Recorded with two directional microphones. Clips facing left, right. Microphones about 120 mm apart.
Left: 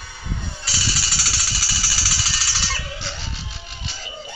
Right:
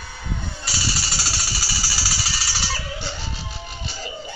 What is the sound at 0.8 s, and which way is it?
Jackhammer, 45° right (ahead or behind).